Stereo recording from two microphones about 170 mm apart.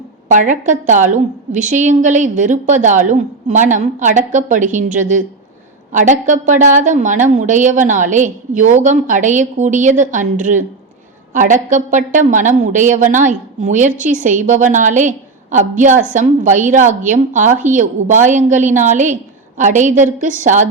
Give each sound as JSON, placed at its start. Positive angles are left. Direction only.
{"t": 0.3, "sound": "a woman's voice", "side_deg": -45}